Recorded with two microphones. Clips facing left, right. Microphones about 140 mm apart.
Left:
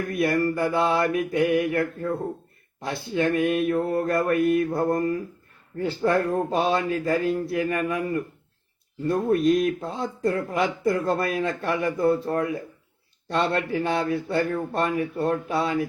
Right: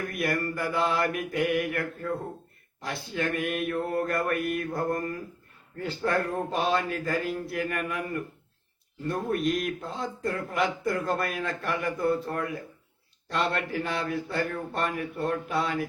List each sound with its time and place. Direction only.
0.1 s speech: 25° left (ahead or behind)
9.0 s speech: 30° left (ahead or behind)